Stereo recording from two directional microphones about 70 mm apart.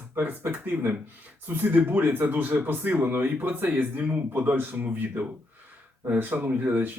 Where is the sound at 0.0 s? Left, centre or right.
Right.